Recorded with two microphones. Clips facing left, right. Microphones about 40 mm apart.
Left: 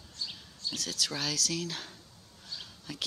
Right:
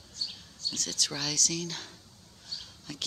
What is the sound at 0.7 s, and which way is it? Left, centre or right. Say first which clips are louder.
Speech: even; centre.